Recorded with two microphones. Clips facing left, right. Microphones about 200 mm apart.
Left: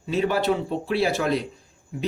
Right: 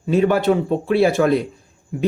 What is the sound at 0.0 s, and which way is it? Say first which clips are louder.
Speech: right 6 dB; 50° right (ahead or behind).